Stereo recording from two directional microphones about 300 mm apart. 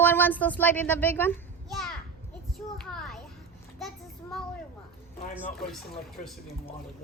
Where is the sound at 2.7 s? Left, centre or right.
Centre.